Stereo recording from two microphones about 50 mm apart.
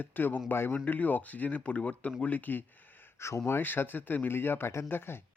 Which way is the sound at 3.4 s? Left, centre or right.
Left.